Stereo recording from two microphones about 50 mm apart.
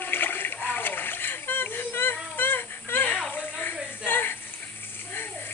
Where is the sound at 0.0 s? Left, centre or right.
Left.